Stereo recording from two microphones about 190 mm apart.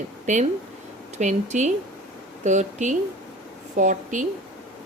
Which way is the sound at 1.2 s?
40° right (ahead or behind).